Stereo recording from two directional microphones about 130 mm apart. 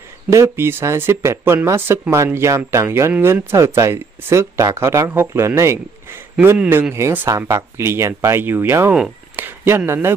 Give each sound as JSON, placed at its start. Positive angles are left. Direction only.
{"t": 0.3, "sound": "speech", "side_deg": -20}
{"t": 8.9, "sound": "speech", "side_deg": -5}
{"t": 9.7, "sound": "speech", "side_deg": -15}